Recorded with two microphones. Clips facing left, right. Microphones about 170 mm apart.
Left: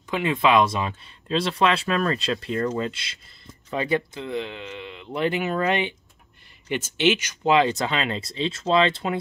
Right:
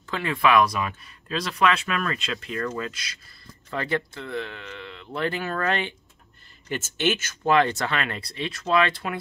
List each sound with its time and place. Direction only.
0.1 s speech: 20° left (ahead or behind)